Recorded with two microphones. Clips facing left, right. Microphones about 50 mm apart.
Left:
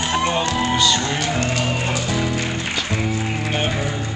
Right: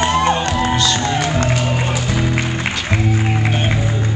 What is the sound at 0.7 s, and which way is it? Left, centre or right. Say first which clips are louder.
Music: even; centre.